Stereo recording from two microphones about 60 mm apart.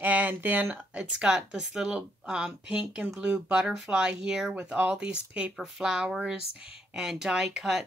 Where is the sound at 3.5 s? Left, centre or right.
Centre.